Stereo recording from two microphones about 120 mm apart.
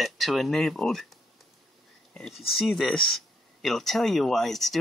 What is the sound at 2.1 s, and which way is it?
Speech, 5° left (ahead or behind).